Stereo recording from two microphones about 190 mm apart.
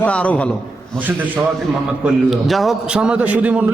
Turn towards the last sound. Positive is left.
turn(degrees=-5)  # may be behind; listen again after turning